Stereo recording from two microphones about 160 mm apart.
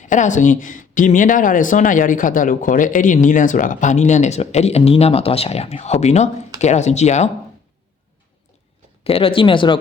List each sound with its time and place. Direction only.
0.0 s speech: 50° left (ahead or behind)
9.0 s speech: 35° left (ahead or behind)